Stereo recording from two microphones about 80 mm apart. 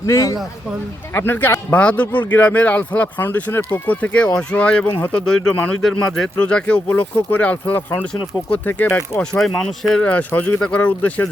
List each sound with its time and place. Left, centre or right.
0.0 s a man's voice: left
1.1 s speech: left
3.2 s speech: left
9.1 s speech: centre
10.0 s speech: centre